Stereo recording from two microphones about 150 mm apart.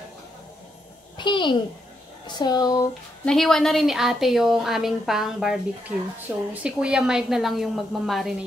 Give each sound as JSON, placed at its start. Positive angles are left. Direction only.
{"t": 1.1, "sound": "a child's voice", "side_deg": 30}
{"t": 3.3, "sound": "a woman's voice", "side_deg": 5}